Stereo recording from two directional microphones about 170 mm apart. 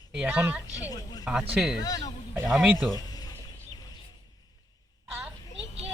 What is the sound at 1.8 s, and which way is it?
Speech, 20° left (ahead or behind).